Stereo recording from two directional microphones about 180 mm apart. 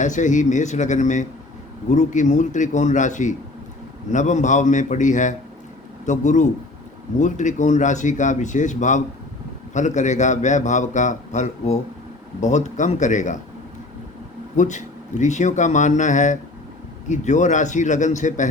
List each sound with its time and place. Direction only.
0.0 s a man's voice: 45° left (ahead or behind)
14.5 s speech: 45° left (ahead or behind)